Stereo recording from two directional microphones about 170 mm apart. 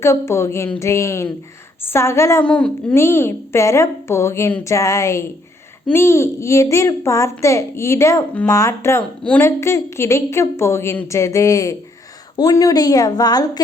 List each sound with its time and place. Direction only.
0.0 s a woman's voice: 15° left (ahead or behind)